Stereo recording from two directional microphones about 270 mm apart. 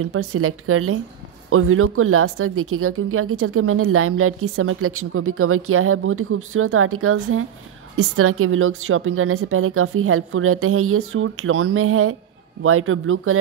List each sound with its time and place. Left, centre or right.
0.0 s speech: right